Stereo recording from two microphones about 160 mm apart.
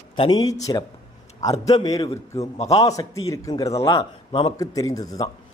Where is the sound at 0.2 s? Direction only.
25° left (ahead or behind).